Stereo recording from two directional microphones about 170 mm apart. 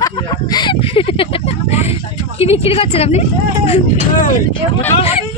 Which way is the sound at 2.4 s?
35° left (ahead or behind).